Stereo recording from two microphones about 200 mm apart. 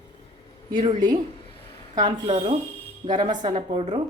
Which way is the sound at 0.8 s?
20° right (ahead or behind).